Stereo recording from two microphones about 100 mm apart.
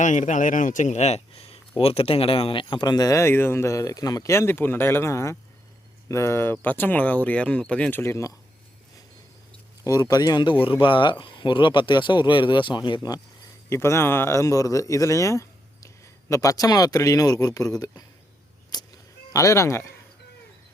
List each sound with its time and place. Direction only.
1.0 s a sound: 85° left
1.8 s speech: 70° left (ahead or behind); by 8.3 s 25° left (ahead or behind)
9.8 s speech: 40° left (ahead or behind)
10.7 s speech: 60° left (ahead or behind)
13.7 s a man's voice: 25° left (ahead or behind)
18.7 s a sound: 45° left (ahead or behind)
19.3 s speech: 30° left (ahead or behind)